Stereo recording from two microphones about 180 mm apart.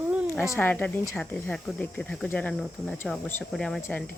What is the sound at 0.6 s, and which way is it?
Speech, 10° left (ahead or behind).